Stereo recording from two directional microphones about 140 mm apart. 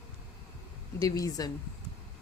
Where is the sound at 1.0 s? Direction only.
25° left (ahead or behind).